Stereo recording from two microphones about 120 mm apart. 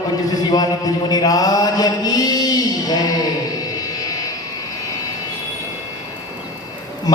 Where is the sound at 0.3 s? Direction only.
30° left (ahead or behind).